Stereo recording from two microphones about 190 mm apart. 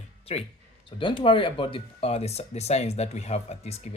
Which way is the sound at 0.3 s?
30° left (ahead or behind).